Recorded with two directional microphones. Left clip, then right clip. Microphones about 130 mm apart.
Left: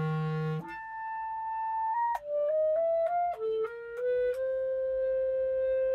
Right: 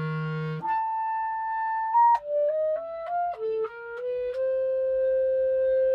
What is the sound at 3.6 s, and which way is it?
Music, 20° right (ahead or behind).